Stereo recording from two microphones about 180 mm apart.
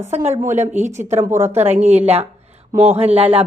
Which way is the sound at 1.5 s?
35° right (ahead or behind).